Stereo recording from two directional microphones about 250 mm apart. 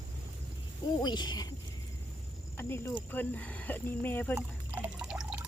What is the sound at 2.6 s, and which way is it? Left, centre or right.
Speech, centre.